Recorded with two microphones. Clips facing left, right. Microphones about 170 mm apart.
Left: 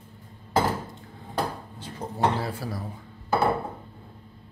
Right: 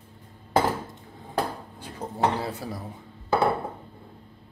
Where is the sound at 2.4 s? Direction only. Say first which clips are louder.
Left 1 dB; 20° right (ahead or behind).